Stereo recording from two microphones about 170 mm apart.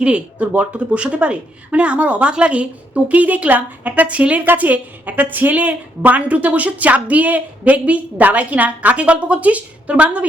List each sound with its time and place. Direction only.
0.0 s speech: 5° right (ahead or behind)